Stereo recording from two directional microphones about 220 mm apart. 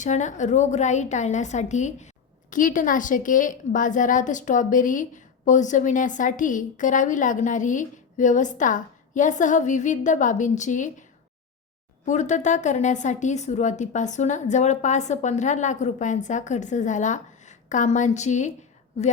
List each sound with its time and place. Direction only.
0.0 s a woman's voice: 35° left (ahead or behind)
12.0 s a woman's voice: 35° left (ahead or behind)